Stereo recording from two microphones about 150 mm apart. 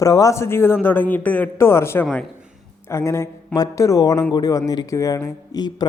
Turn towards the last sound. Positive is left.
turn(degrees=25)  # may be behind; listen again after turning